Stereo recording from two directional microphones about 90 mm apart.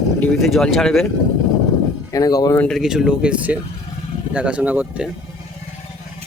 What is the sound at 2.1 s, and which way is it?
Speech, 40° left (ahead or behind).